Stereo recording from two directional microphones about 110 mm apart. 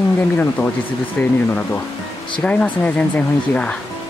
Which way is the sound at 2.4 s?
10° left (ahead or behind).